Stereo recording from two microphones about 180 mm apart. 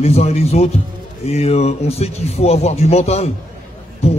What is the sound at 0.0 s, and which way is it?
Speech, 35° left (ahead or behind).